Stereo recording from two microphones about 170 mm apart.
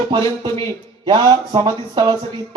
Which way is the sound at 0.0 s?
30° right (ahead or behind).